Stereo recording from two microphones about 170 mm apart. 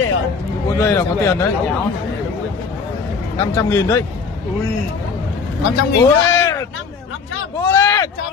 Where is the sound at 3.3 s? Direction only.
20° left (ahead or behind).